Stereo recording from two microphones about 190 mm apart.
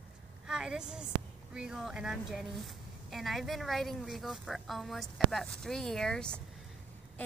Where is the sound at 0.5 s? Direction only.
5° right (ahead or behind).